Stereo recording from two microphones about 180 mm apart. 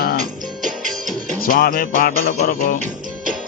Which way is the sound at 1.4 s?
50° left (ahead or behind).